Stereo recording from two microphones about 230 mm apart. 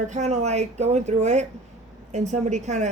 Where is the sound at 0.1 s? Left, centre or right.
Right.